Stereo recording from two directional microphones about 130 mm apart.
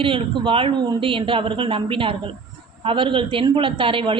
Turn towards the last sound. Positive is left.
turn(degrees=-40)  # may be behind; listen again after turning